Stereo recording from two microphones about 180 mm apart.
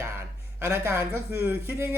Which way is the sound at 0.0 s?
15° right (ahead or behind).